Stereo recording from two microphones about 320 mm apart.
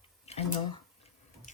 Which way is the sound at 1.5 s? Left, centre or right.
Left.